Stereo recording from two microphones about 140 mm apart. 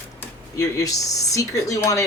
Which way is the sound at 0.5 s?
25° left (ahead or behind).